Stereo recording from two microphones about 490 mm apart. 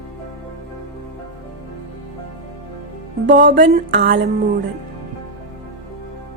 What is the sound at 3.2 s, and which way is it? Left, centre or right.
A woman's voice, right.